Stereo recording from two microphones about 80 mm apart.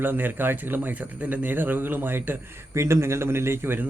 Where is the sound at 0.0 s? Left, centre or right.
Right.